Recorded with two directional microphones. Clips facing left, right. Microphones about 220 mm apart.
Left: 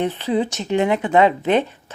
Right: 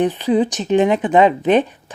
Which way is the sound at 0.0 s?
15° right (ahead or behind).